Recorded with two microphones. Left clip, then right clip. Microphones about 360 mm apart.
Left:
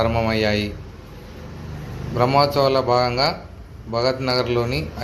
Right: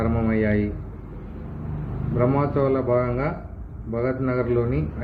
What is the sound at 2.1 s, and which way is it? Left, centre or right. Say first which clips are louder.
Speech: left 5 dB; centre.